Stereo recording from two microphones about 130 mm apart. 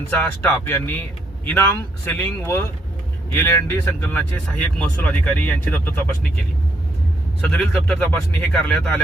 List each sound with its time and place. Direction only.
0.1 s speech: 15° left (ahead or behind)
2.0 s speech: 15° left (ahead or behind)
4.4 s speech: 10° left (ahead or behind)
7.4 s speech: 5° left (ahead or behind)